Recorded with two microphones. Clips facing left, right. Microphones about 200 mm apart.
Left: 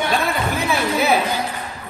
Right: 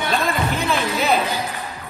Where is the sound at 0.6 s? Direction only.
10° left (ahead or behind).